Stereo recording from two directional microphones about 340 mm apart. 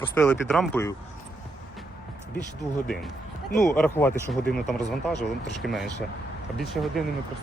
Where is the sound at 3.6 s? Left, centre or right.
Centre.